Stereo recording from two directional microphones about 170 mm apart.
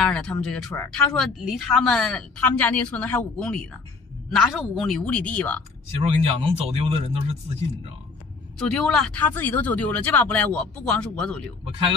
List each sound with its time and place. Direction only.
0.0 s speech: 5° left (ahead or behind)
6.4 s speech: 35° right (ahead or behind)
8.5 s speech: 5° left (ahead or behind)